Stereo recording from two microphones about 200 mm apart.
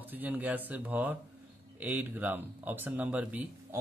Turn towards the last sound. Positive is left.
turn(degrees=-5)  # may be behind; listen again after turning